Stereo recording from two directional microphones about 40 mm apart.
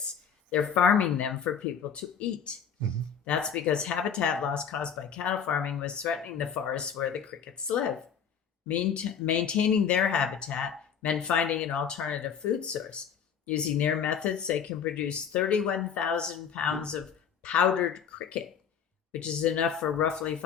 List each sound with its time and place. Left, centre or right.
0.5 s speech: left